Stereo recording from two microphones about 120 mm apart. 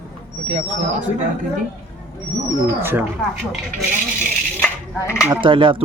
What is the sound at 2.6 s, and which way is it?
Speech, 20° right (ahead or behind).